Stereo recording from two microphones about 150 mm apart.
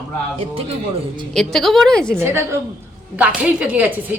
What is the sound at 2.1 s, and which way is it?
A woman's voice, 15° right (ahead or behind).